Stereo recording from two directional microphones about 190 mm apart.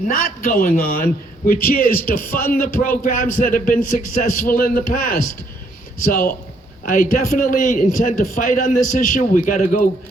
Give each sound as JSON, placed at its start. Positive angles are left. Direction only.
{"t": 0.1, "sound": "a man's voice", "side_deg": 50}